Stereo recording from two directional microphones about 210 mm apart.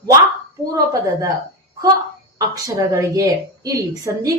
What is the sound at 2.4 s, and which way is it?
A woman's voice, 15° right (ahead or behind).